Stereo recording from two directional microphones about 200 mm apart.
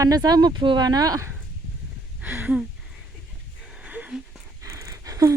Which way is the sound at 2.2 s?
10° right (ahead or behind).